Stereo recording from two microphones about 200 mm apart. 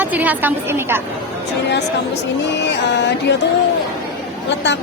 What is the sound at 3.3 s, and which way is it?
Speech, 60° left (ahead or behind).